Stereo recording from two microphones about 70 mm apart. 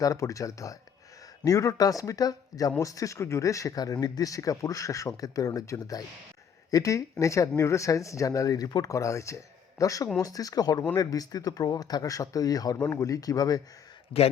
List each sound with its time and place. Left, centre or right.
0.0 s speech: left